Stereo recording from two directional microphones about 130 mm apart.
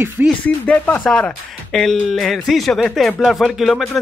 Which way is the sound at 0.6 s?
15° left (ahead or behind).